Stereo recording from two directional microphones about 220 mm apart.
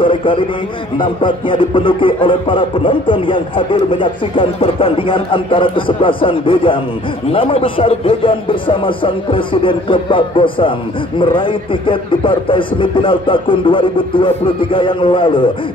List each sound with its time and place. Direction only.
0.0 s speech: 25° left (ahead or behind)